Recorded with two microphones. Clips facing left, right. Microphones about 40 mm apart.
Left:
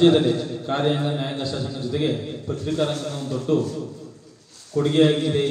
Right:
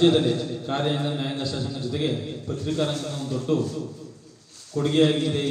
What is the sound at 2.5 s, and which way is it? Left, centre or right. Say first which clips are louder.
A man's voice: left 2 dB; left.